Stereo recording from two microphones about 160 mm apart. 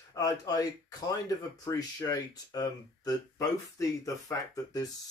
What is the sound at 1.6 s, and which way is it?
Speech, 25° left (ahead or behind).